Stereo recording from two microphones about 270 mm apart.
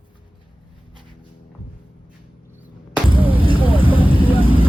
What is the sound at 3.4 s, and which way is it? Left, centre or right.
Vehicle, centre.